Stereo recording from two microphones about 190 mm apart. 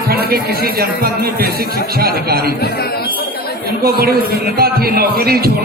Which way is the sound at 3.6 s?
55° right (ahead or behind).